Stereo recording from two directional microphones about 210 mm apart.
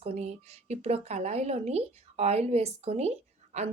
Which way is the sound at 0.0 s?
35° right (ahead or behind).